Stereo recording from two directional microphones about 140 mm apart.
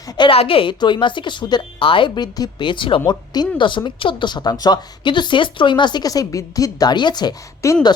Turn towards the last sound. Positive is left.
turn(degrees=30)  # may be behind; listen again after turning